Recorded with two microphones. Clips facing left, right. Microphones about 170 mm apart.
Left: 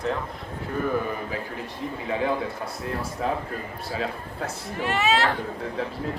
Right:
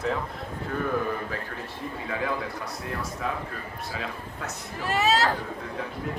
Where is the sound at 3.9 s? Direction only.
30° left (ahead or behind).